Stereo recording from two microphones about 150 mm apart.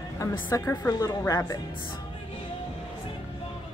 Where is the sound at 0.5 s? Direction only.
20° left (ahead or behind).